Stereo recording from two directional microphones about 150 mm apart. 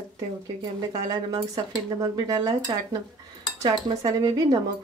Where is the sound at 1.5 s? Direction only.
25° right (ahead or behind).